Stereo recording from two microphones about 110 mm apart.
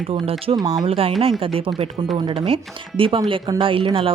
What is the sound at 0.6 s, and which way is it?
Speech, 30° right (ahead or behind).